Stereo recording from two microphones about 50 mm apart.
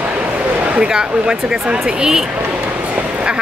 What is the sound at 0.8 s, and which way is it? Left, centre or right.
Speech, centre.